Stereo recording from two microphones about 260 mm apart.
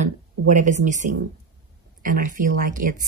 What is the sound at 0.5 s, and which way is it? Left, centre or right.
Speech, right.